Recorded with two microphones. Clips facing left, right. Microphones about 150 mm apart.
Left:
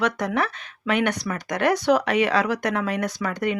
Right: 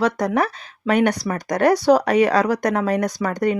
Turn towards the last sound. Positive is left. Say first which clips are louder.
# right 5 dB
turn(degrees=-40)  # may be behind; listen again after turning